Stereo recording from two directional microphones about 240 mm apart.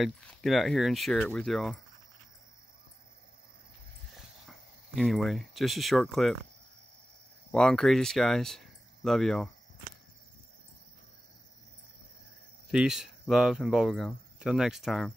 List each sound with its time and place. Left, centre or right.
0.0 s speech: centre
4.2 s speech: centre
7.5 s speech: centre
12.7 s speech: centre